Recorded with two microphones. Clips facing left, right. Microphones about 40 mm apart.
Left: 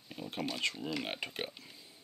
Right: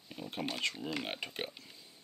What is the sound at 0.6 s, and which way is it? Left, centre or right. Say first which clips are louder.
Speech: left 1 dB; centre.